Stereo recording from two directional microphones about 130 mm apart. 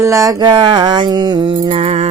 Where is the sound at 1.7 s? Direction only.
50° right (ahead or behind).